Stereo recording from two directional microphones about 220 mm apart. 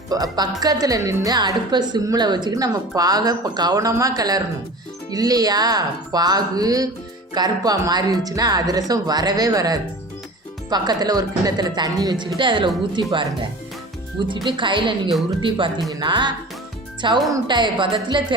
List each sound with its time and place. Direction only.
0.1 s speech: 15° right (ahead or behind)
17.3 s speech: 20° right (ahead or behind)